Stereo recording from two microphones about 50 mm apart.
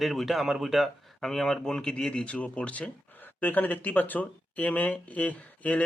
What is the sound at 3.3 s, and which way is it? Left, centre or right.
Speech, left.